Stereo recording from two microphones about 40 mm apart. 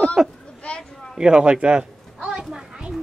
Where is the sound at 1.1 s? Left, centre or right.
Right.